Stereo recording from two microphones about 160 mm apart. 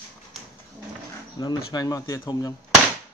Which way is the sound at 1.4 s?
25° left (ahead or behind).